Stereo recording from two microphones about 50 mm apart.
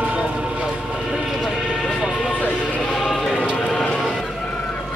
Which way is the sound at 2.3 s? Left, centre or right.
Left.